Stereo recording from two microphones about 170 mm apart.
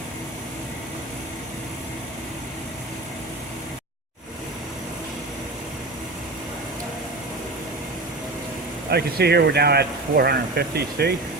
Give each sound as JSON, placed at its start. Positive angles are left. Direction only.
{"t": 8.9, "sound": "speech", "side_deg": -70}